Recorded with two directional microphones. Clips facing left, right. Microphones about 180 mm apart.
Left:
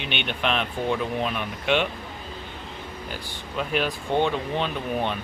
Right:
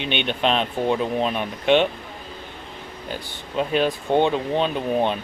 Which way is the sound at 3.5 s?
25° right (ahead or behind).